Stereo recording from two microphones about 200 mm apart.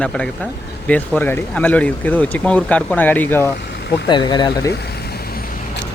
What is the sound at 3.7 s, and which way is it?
Vehicle, 55° left (ahead or behind).